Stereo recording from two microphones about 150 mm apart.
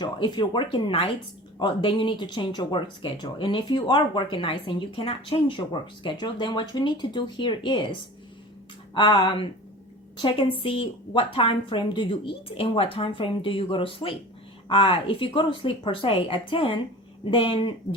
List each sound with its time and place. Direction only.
0.0 s speech: 30° left (ahead or behind)